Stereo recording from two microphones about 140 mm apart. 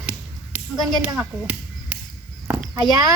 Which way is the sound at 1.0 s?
10° right (ahead or behind).